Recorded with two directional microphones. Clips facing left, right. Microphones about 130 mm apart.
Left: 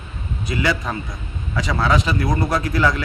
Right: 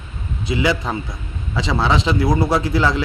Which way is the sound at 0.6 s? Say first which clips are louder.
Right 2 dB; 25° right (ahead or behind).